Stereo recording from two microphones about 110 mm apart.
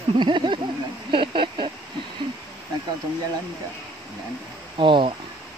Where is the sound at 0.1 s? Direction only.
45° right (ahead or behind).